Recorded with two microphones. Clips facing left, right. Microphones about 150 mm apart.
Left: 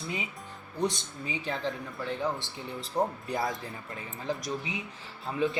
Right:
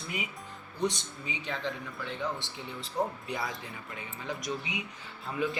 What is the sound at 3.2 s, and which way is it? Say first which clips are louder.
Speech: left 4 dB; 40° left (ahead or behind).